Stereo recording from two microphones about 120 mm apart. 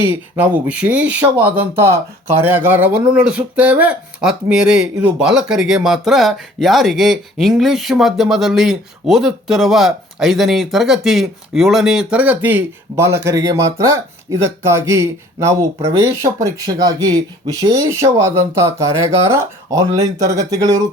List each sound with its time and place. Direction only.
0.1 s speech: 15° right (ahead or behind)